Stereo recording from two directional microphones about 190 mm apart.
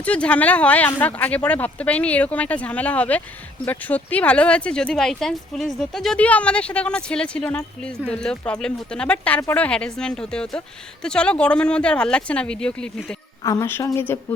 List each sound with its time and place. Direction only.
0.0 s speech: 5° left (ahead or behind)
13.4 s speech: 15° left (ahead or behind)